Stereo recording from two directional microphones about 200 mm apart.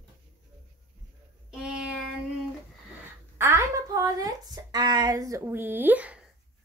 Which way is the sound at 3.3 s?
15° right (ahead or behind).